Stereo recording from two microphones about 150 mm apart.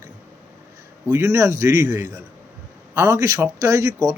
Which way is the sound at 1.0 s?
20° right (ahead or behind).